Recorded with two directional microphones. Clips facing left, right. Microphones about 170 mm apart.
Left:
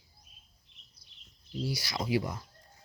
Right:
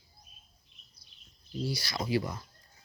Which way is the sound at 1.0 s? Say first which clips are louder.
Right 1 dB; 15° left (ahead or behind).